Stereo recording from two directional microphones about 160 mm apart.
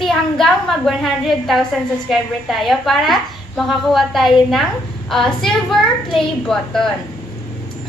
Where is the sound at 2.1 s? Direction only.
Centre (ahead or behind).